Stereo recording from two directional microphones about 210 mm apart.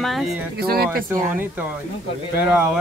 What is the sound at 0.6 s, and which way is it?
Speech, 45° right (ahead or behind).